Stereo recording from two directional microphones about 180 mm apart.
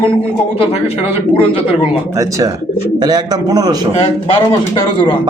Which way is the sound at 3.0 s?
20° right (ahead or behind).